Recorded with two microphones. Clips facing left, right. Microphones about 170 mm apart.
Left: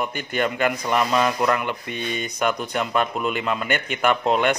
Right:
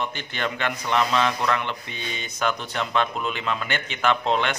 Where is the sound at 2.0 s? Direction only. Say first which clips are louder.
Left 6 dB; 40° left (ahead or behind).